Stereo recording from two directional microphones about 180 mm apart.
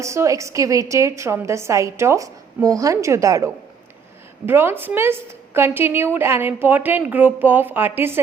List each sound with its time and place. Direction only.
0.0 s a woman's voice: 15° right (ahead or behind)